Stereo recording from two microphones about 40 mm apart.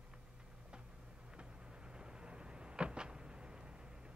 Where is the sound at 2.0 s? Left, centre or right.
Right.